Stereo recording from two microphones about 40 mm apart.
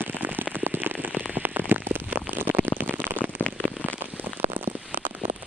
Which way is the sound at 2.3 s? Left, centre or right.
Right.